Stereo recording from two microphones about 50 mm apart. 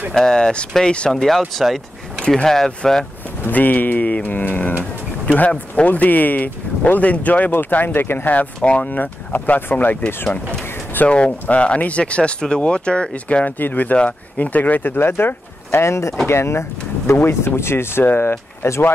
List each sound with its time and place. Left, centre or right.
0.1 s speech: centre
1.1 s speech: centre
2.2 s speech: centre
3.4 s speech: left
5.2 s a sound: left
5.5 s speech: left
7.5 s speech: left
8.5 s speech: left
8.8 s speech: left
10.6 s a sound: left
11.1 s speech: left
13.6 s speech: left
15.8 s speech: left
16.3 s speech: left